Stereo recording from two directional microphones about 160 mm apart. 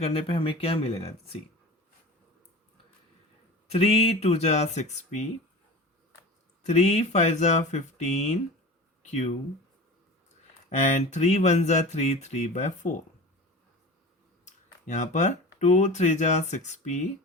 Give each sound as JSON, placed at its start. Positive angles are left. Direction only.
{"t": 0.0, "sound": "speech", "side_deg": 35}
{"t": 3.7, "sound": "speech", "side_deg": 40}
{"t": 6.6, "sound": "speech", "side_deg": 45}
{"t": 10.7, "sound": "speech", "side_deg": 45}
{"t": 14.4, "sound": "speech", "side_deg": 50}